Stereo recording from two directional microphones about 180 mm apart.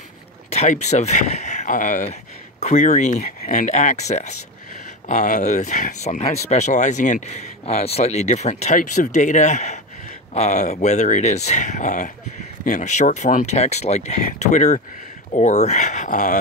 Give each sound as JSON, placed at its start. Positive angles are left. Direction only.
{"t": 0.5, "sound": "speech", "side_deg": 35}